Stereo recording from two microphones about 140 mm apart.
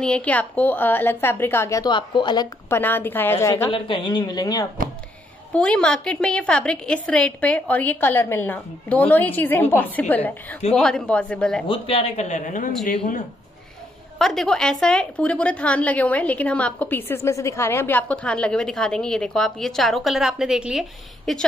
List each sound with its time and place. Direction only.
0.0 s a woman's voice: 10° left (ahead or behind); by 2.4 s 35° left (ahead or behind)
2.7 s a woman's voice: 15° left (ahead or behind)
3.7 s speech: 35° left (ahead or behind)
5.5 s a woman's voice: 5° left (ahead or behind)
11.6 s speech: 40° left (ahead or behind); by 12.7 s 65° left (ahead or behind)
14.1 s a woman's voice: centre (ahead or behind)